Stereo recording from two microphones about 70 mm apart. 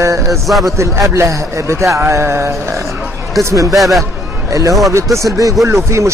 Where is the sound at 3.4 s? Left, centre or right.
Right.